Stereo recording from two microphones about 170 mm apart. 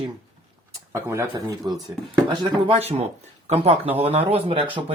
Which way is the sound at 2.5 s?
35° right (ahead or behind).